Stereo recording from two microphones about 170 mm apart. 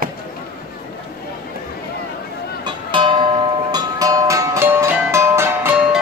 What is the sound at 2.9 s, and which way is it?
Music, 30° right (ahead or behind).